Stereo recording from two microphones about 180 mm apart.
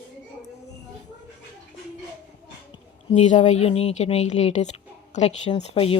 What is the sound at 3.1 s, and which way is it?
A woman's voice, 40° left (ahead or behind).